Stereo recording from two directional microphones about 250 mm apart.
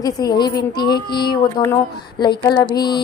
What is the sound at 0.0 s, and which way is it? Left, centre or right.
A woman's voice, centre.